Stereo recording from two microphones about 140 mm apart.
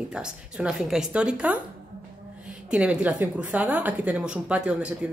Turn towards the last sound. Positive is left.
turn(degrees=-10)  # may be behind; listen again after turning